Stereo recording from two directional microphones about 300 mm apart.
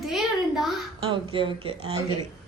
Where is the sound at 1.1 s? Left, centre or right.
Centre.